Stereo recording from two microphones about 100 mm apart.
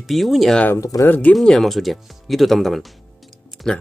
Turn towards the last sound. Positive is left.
turn(degrees=5)  # may be behind; listen again after turning